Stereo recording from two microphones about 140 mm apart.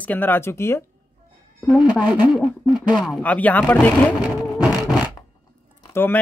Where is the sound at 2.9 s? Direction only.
Centre (ahead or behind).